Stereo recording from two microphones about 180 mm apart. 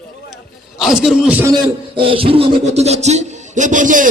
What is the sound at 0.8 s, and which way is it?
Speech, centre (ahead or behind).